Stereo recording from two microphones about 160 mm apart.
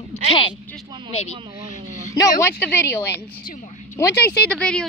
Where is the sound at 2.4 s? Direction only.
15° left (ahead or behind).